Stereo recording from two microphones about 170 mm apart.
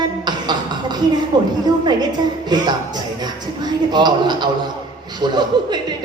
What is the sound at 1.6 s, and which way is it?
Speech, 25° right (ahead or behind).